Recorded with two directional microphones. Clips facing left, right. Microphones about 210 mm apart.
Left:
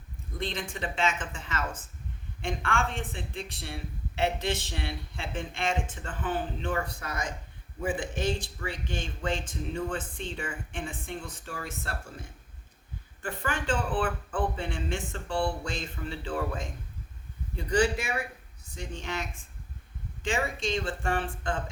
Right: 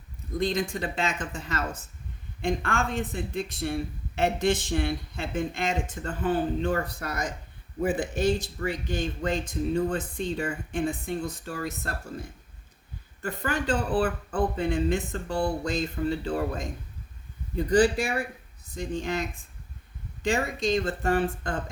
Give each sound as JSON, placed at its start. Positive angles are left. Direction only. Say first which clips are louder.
{"t": 0.3, "sound": "speech", "louder": "right 7 dB", "side_deg": -40}
{"t": 8.5, "sound": "speech", "louder": "right 6 dB", "side_deg": -40}
{"t": 13.2, "sound": "speech", "louder": "right 3 dB", "side_deg": -40}
{"t": 17.7, "sound": "speech", "louder": "right 4 dB", "side_deg": -35}
{"t": 20.2, "sound": "speech", "louder": "right 4 dB", "side_deg": -40}